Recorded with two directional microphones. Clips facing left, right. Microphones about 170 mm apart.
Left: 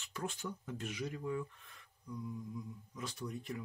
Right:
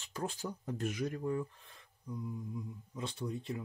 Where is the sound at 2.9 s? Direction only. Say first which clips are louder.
Right 4 dB; 30° right (ahead or behind).